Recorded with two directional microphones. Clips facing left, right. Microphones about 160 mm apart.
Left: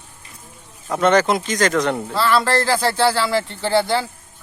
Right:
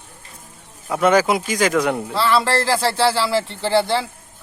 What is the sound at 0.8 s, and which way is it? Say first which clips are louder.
Speech: even; 5° right (ahead or behind).